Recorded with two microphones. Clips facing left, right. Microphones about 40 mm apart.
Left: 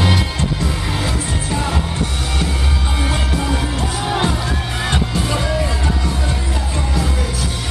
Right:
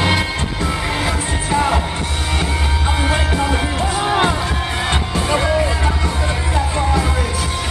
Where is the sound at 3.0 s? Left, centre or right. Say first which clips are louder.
Right 2 dB; centre.